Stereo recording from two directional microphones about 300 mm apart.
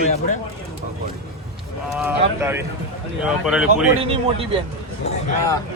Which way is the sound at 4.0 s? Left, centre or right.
Centre.